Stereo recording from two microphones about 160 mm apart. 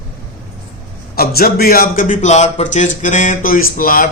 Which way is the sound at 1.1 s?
70° left (ahead or behind).